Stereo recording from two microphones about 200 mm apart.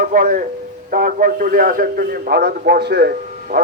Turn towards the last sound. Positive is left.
turn(degrees=-50)  # may be behind; listen again after turning